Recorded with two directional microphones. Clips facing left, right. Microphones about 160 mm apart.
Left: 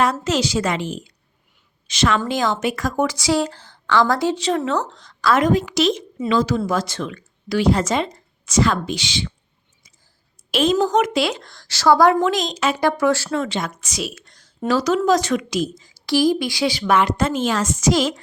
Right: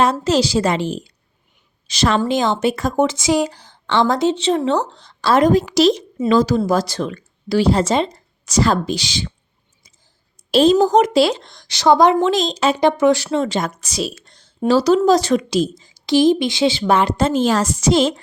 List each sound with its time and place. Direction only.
0.0 s a woman's voice: 30° right (ahead or behind)
2.2 s a woman's voice: 25° right (ahead or behind)
3.8 s a woman's voice: 25° right (ahead or behind)
10.5 s a woman's voice: 35° right (ahead or behind)
11.4 s a woman's voice: 20° right (ahead or behind)
13.4 s a woman's voice: 40° right (ahead or behind)